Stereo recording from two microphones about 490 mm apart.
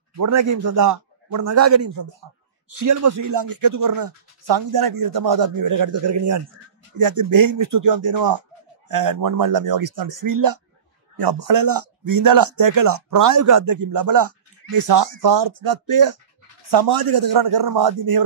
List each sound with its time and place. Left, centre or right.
0.2 s speech: right
7.0 s speech: right
11.1 s speech: right
11.5 s speech: right
13.7 s speech: right
15.5 s speech: right